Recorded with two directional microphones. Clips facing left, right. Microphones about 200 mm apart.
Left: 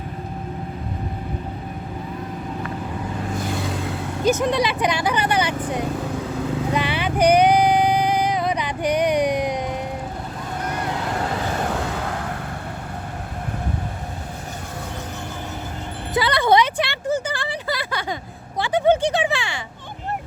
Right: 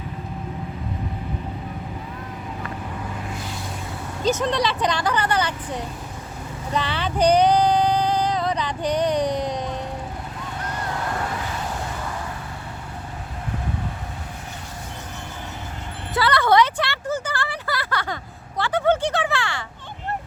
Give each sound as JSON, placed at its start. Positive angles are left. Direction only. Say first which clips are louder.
{"t": 3.4, "sound": "vehicle", "louder": "left 7 dB", "side_deg": 65}
{"t": 4.2, "sound": "speech", "louder": "left 2 dB", "side_deg": 10}
{"t": 6.1, "sound": "vehicle", "louder": "left 11 dB", "side_deg": 80}
{"t": 6.7, "sound": "a sound", "louder": "right 1 dB", "side_deg": 10}
{"t": 11.5, "sound": "vehicle", "louder": "left 5 dB", "side_deg": 70}
{"t": 16.1, "sound": "a sound", "louder": "left 1 dB", "side_deg": 15}